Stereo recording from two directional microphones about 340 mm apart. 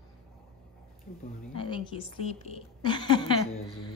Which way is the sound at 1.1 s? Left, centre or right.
Centre.